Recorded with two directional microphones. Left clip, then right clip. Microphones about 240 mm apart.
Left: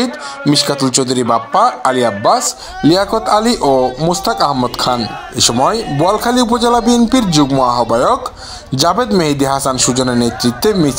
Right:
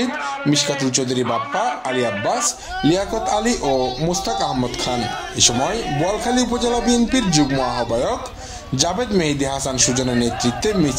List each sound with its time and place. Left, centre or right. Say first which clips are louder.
0.5 s a man's voice: left 7 dB; left
1.2 s a man's voice: left 13 dB; left
1.8 s a man's voice: left 8 dB; left